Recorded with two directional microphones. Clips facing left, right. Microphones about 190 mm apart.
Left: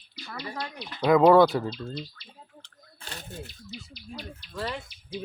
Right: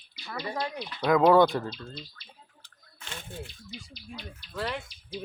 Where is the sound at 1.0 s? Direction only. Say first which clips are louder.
Left 3 dB; 5° left (ahead or behind).